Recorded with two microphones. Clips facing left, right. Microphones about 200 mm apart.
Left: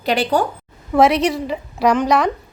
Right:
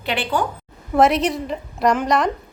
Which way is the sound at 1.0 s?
Centre (ahead or behind).